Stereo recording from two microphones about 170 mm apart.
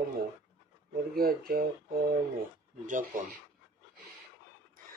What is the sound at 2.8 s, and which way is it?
Speech, 50° right (ahead or behind).